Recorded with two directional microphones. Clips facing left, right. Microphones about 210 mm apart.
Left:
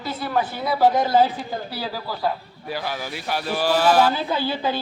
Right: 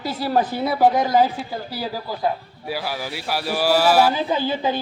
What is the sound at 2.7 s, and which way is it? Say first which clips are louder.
A man's voice: right 1 dB; 5° right (ahead or behind).